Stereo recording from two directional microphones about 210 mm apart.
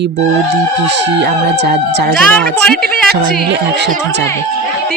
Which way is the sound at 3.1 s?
50° right (ahead or behind).